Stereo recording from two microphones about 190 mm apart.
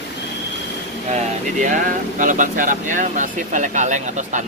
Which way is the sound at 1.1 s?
40° right (ahead or behind).